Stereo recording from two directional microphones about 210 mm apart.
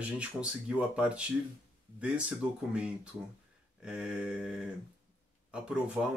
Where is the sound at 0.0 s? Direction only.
5° right (ahead or behind).